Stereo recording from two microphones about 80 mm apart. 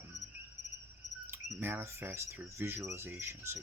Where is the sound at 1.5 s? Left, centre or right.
Right.